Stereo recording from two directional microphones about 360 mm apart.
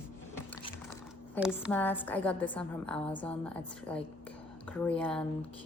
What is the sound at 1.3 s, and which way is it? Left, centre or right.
Speech, centre.